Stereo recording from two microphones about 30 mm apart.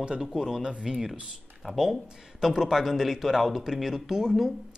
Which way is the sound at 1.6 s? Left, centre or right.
Centre.